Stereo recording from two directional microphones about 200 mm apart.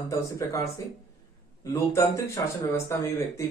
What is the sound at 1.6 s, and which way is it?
Speech, 15° left (ahead or behind).